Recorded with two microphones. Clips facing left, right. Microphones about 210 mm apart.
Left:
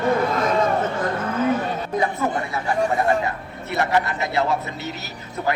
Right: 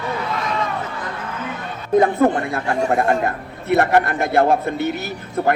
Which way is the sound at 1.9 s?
55° right (ahead or behind).